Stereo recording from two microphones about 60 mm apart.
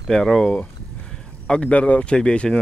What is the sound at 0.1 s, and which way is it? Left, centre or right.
Speech, centre.